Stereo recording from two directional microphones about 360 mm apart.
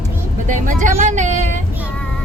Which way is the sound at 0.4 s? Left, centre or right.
Right.